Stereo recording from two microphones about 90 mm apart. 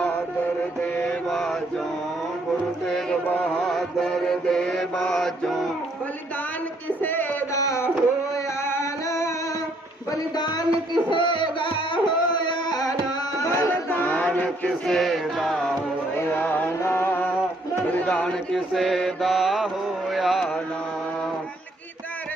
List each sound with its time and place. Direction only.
0.8 s mantra: 15° left (ahead or behind)
1.3 s mantra: 5° left (ahead or behind)
2.8 s music: 5° left (ahead or behind)
3.6 s mantra: 5° left (ahead or behind)
7.0 s music: 20° left (ahead or behind)
7.5 s a sound: 35° left (ahead or behind)
8.4 s music: 30° left (ahead or behind)
10.1 s a sound: 50° left (ahead or behind)
11.1 s music: 65° left (ahead or behind); by 13.5 s 45° left (ahead or behind)
13.5 s a sound: 25° left (ahead or behind)
14.8 s music: centre (ahead or behind)
16.1 s music: 25° left (ahead or behind)
17.9 s speech: 10° left (ahead or behind)
18.5 s mantra: centre (ahead or behind)